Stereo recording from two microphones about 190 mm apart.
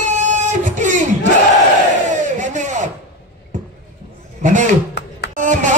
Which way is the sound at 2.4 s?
40° right (ahead or behind).